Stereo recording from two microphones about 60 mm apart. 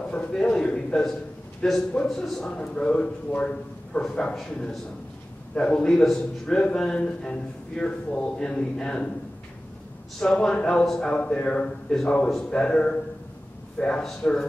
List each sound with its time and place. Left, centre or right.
0.1 s a man's voice: centre
1.6 s a man's voice: centre
5.5 s a man's voice: centre
10.2 s a man's voice: centre